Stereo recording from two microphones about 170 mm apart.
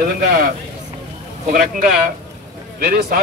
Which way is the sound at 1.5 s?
60° right (ahead or behind).